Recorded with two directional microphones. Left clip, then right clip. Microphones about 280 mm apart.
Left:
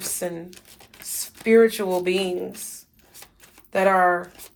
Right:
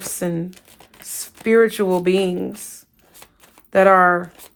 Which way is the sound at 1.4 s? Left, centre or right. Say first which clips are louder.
Right 2 dB; right.